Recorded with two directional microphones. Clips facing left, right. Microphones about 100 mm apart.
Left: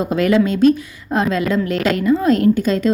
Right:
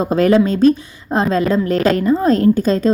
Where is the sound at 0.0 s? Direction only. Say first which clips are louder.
Right 2 dB; 35° right (ahead or behind).